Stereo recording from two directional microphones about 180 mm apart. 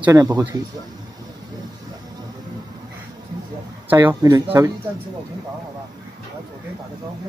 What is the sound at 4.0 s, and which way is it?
Speech, 20° right (ahead or behind).